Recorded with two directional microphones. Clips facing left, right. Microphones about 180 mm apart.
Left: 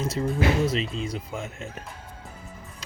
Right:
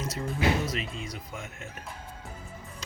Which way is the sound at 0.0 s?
25° left (ahead or behind).